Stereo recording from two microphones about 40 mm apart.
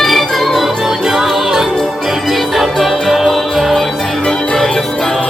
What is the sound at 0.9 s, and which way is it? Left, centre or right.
Music, centre.